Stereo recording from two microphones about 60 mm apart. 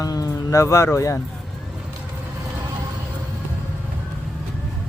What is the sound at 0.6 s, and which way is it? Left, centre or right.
Speech, left.